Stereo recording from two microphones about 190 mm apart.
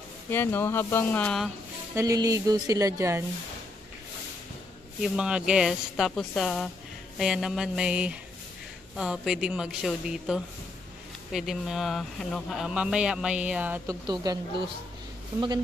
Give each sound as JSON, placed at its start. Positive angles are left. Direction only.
{"t": 0.3, "sound": "speech", "side_deg": 10}
{"t": 2.0, "sound": "speech", "side_deg": -20}
{"t": 5.0, "sound": "speech", "side_deg": -5}
{"t": 14.0, "sound": "a woman's voice", "side_deg": -20}